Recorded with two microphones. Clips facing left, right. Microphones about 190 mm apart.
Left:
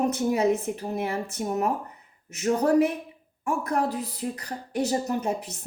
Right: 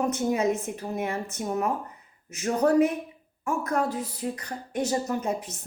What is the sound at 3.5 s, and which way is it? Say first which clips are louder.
Speech: left 1 dB; 35° left (ahead or behind).